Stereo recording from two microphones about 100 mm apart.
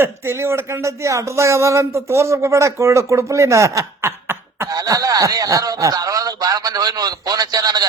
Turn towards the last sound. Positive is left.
turn(degrees=-40)  # may be behind; listen again after turning